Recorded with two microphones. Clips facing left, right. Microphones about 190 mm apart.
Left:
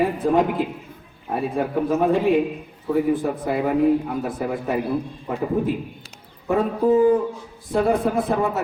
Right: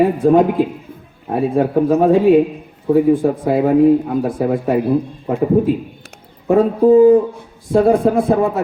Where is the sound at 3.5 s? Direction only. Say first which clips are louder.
Right 7 dB; 55° right (ahead or behind).